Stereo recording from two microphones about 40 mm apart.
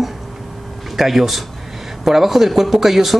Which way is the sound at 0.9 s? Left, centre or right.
Centre.